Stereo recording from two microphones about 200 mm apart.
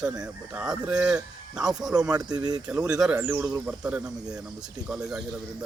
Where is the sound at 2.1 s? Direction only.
20° right (ahead or behind).